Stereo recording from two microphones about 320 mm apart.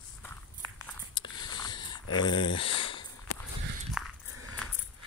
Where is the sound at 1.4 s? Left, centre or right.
Centre.